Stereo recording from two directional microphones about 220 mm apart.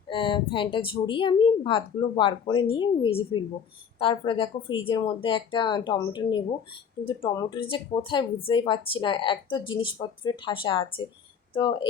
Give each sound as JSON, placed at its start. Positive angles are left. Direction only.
{"t": 0.1, "sound": "speech", "side_deg": 20}